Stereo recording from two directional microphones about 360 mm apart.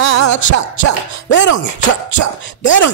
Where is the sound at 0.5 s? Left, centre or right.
Left.